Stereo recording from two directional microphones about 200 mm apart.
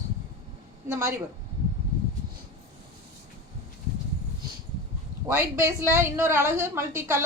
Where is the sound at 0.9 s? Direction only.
15° right (ahead or behind).